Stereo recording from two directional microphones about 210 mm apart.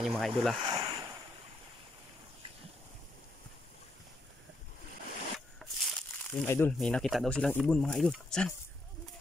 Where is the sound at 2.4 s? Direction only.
25° right (ahead or behind).